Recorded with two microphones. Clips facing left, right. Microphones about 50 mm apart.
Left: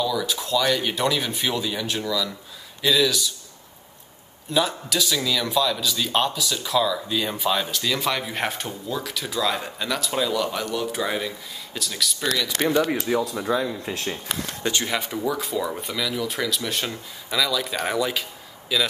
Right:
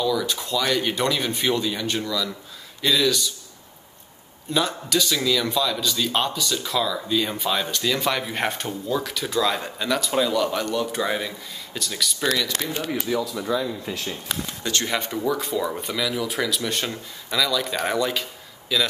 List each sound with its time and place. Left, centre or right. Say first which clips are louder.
0.0 s a man's voice: right 1 dB; centre
4.5 s a man's voice: even; centre
13.1 s speech: left 1 dB; left
14.7 s a man's voice: even; centre